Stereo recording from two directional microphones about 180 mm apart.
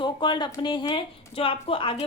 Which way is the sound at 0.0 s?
25° left (ahead or behind).